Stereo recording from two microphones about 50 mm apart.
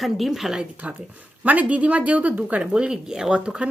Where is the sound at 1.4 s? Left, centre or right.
Right.